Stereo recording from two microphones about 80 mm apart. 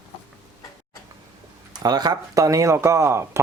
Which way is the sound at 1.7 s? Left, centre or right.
Right.